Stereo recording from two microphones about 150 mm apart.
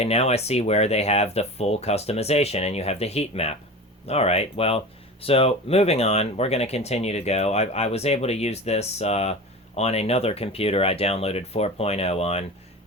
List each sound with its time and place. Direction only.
0.0 s speech: 45° left (ahead or behind)